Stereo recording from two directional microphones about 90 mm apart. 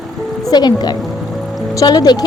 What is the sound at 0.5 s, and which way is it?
Speech, 50° left (ahead or behind).